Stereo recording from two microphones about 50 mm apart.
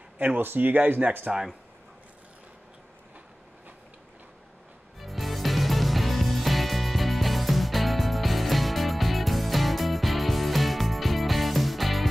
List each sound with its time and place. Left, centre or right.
0.4 s speech: right
4.9 s music: centre